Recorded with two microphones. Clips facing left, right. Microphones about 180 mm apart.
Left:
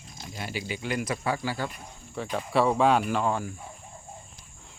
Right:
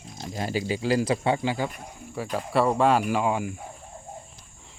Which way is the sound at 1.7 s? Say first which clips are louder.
Right 4 dB; 5° right (ahead or behind).